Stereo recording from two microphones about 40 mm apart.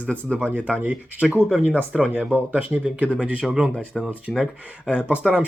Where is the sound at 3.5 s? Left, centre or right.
Right.